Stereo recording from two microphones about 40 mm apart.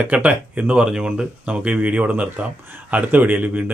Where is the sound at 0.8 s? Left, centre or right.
Right.